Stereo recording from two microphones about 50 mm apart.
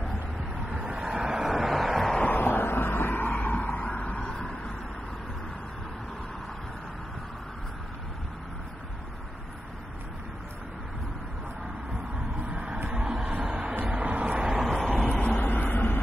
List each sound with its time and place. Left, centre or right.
0.7 s vehicle: centre
2.3 s vehicle: left
4.3 s vehicle: centre
12.4 s a sound: right
12.9 s a sound: centre
13.3 s a sound: right
13.8 s music: right
14.4 s vehicle: centre
15.0 s vehicle: left
15.4 s vehicle: left